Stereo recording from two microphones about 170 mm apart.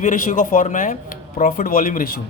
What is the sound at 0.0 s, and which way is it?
A man's voice, 50° left (ahead or behind).